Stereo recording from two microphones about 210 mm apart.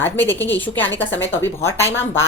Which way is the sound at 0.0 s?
10° left (ahead or behind).